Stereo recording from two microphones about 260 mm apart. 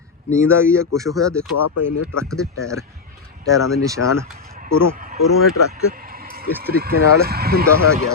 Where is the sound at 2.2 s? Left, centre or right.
Centre.